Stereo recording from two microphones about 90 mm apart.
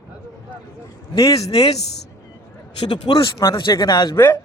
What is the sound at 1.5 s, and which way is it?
Speech, 90° left.